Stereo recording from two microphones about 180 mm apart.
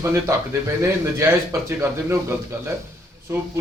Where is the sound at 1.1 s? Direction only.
15° right (ahead or behind).